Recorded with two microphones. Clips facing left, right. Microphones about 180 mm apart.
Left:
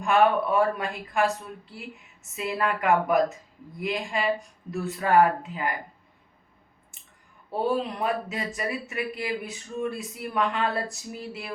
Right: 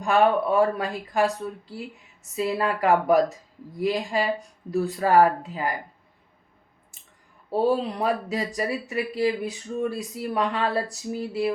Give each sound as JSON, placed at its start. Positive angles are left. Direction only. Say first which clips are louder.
{"t": 0.0, "sound": "speech", "louder": "right 1 dB", "side_deg": -30}
{"t": 2.3, "sound": "speech", "louder": "right 3 dB", "side_deg": -35}
{"t": 7.5, "sound": "speech", "louder": "right 4 dB", "side_deg": -30}